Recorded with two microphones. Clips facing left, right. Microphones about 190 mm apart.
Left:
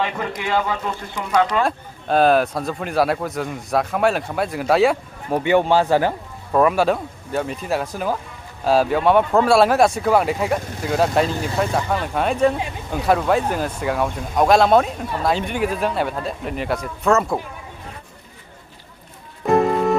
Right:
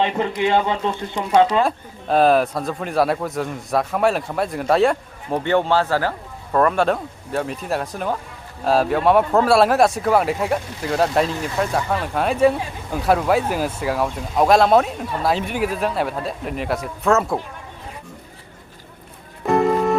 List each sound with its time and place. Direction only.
0.0 s speech: 25° right (ahead or behind)
1.6 s speech: centre (ahead or behind); by 6.1 s 20° left (ahead or behind)
6.5 s speech: 5° left (ahead or behind)
19.5 s music: centre (ahead or behind)